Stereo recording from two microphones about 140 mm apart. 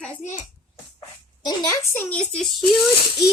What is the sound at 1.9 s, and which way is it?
Speech, 10° left (ahead or behind).